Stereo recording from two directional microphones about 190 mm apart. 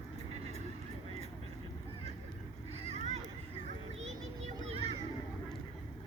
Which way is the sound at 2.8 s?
35° right (ahead or behind).